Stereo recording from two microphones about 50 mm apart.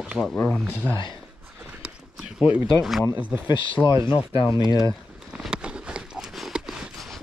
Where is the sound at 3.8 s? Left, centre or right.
Right.